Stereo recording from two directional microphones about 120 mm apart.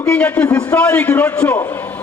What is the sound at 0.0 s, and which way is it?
A man's voice, 10° left (ahead or behind).